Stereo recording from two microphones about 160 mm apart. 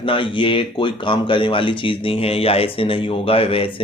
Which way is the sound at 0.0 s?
30° left (ahead or behind).